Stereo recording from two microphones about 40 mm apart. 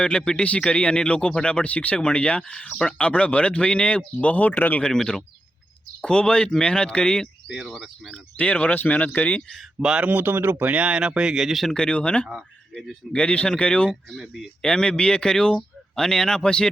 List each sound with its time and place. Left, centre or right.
0.0 s speech: left
4.5 s speech: left
4.8 s speech: centre
7.5 s speech: centre
8.4 s speech: left
8.7 s speech: left
9.8 s speech: right
10.2 s speech: right
10.8 s speech: right
11.7 s speech: left
14.1 s speech: centre
14.6 s speech: left